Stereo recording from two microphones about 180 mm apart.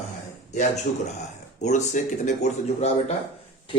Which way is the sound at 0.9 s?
50° left (ahead or behind).